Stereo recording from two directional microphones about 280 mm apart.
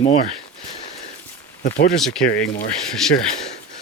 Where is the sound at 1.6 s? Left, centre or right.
Left.